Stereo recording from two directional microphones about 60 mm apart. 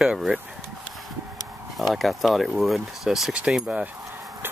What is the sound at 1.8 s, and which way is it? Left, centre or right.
Speech, centre.